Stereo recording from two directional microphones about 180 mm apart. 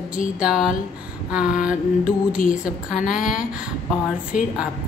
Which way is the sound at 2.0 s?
50° left (ahead or behind).